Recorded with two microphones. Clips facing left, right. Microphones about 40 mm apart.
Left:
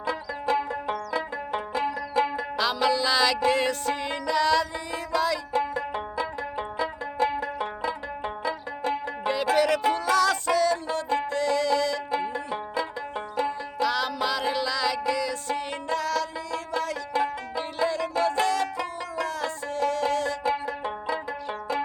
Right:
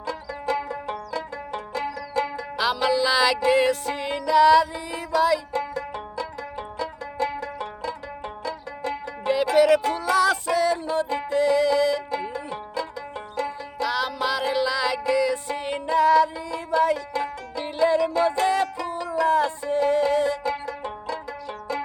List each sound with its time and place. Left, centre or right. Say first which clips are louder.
0.0 s banjo: left 1 dB; centre
2.6 s music: right 2 dB; centre
5.5 s banjo: left 2 dB; centre
9.2 s music: right 5 dB; centre
12.3 s music: left 1 dB; centre
13.3 s banjo: left 1 dB; centre
13.8 s music: right 1 dB; centre
17.2 s music: left 2 dB; centre
17.8 s music: right 6 dB; centre
18.9 s music: right 7 dB; centre
19.3 s music: right 9 dB; centre
20.4 s banjo: left 1 dB; centre